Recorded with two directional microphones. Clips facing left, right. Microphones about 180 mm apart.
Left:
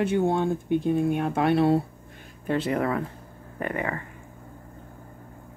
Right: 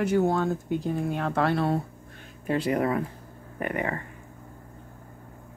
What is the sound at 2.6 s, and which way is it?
Speech, 35° right (ahead or behind).